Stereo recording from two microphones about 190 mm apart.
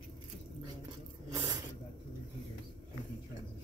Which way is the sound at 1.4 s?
20° right (ahead or behind).